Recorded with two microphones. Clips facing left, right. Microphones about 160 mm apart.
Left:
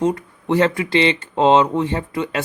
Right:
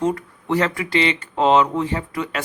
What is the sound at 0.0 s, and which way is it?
Speech, 20° left (ahead or behind).